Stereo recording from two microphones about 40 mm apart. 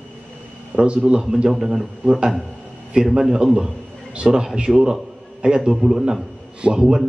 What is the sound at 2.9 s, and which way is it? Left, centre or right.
A man's voice, right.